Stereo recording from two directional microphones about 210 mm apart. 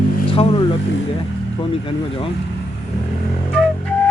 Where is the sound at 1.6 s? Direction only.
25° left (ahead or behind).